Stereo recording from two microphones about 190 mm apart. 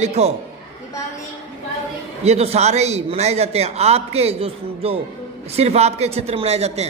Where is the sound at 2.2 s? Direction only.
35° right (ahead or behind).